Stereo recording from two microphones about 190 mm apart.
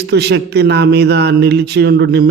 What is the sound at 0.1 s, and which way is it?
A man's voice, 60° right (ahead or behind).